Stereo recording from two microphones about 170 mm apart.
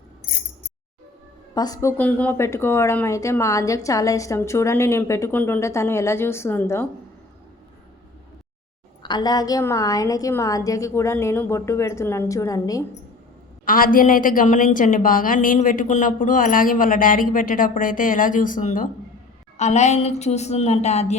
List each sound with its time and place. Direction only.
1.5 s speech: 20° left (ahead or behind)
9.0 s a woman's voice: 25° left (ahead or behind)
13.7 s a woman's voice: 55° left (ahead or behind)